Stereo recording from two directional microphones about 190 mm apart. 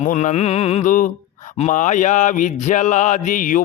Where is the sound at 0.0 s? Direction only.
40° left (ahead or behind).